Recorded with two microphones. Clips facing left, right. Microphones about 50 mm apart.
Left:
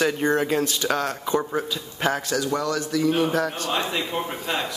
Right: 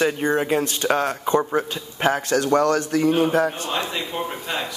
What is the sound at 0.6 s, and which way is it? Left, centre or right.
Speech, right.